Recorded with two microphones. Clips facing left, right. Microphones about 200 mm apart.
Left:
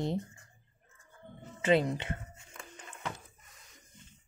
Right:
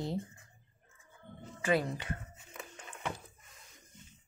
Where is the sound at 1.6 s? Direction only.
20° left (ahead or behind).